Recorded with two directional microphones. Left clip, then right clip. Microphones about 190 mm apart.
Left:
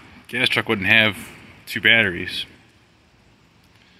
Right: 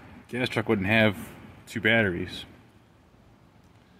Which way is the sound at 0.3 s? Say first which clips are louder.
Left 7 dB; 5° right (ahead or behind).